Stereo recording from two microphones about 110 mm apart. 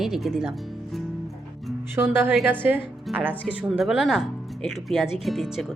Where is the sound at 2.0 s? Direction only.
20° right (ahead or behind).